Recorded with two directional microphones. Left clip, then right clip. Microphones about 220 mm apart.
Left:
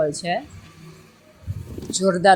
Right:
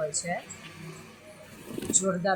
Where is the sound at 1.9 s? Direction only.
15° left (ahead or behind).